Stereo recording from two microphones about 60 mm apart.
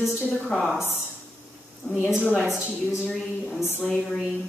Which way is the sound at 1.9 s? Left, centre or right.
Centre.